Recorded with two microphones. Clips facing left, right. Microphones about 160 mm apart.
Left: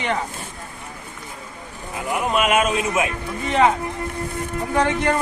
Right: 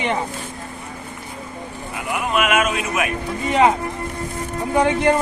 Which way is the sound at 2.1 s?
35° left (ahead or behind).